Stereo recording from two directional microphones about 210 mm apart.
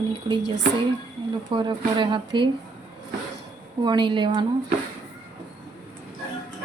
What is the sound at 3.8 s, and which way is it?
Speech, 20° right (ahead or behind).